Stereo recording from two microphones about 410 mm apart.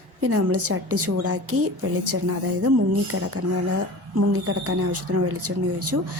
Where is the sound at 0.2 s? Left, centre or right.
Right.